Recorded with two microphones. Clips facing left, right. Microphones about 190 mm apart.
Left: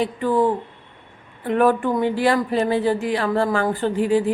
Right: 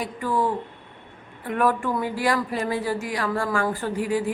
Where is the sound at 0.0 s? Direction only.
25° left (ahead or behind).